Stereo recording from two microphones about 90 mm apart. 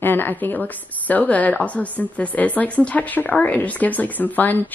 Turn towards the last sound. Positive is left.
turn(degrees=20)  # may be behind; listen again after turning